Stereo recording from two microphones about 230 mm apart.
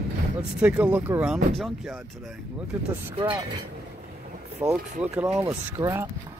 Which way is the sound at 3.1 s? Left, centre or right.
Right.